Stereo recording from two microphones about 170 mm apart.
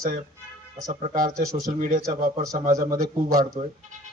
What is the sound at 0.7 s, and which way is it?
A man's voice, 50° right (ahead or behind).